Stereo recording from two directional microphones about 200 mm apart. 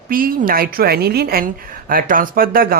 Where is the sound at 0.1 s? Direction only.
45° right (ahead or behind).